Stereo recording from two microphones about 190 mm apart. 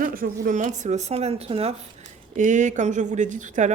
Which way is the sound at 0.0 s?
45° right (ahead or behind).